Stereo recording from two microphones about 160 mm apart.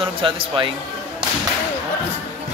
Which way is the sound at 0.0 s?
35° right (ahead or behind).